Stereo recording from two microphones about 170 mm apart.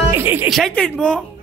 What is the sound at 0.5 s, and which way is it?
Speech, 5° left (ahead or behind).